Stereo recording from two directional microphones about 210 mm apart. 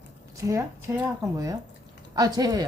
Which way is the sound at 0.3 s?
15° right (ahead or behind).